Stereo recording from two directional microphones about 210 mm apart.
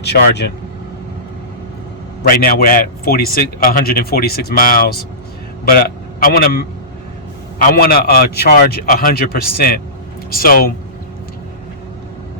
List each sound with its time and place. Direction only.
0.0 s a man's voice: 50° left (ahead or behind)
2.2 s a man's voice: 45° left (ahead or behind)